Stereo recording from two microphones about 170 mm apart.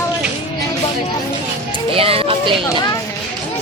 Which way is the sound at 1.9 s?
35° right (ahead or behind).